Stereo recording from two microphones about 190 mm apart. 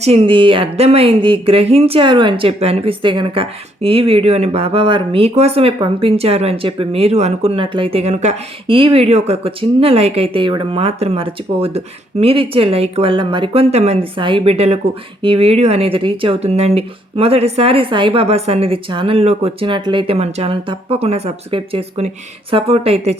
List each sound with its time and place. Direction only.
0.0 s speech: 30° right (ahead or behind)